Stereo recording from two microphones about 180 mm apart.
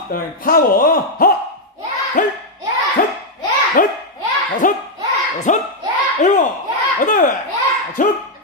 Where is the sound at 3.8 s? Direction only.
50° left (ahead or behind).